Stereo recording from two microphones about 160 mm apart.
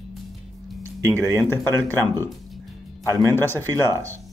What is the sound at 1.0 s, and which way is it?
Speech, 20° right (ahead or behind).